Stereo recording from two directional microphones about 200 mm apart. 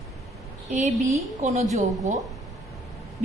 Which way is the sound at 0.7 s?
40° right (ahead or behind).